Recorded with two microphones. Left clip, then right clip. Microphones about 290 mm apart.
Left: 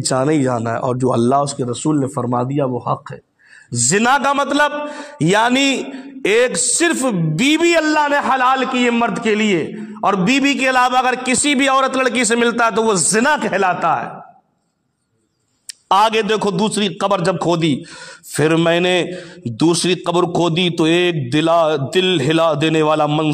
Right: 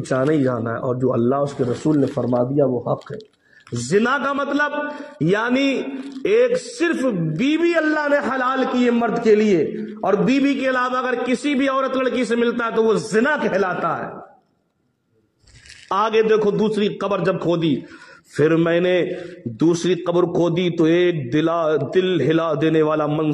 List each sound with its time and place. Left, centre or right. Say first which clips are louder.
0.1 s a man's voice: left 2 dB; left
3.9 s a man's voice: left 4 dB; left
15.9 s a man's voice: left 3 dB; left